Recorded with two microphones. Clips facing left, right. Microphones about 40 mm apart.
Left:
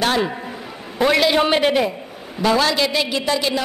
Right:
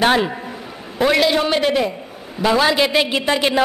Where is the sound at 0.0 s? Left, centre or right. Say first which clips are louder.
Right 3 dB; right.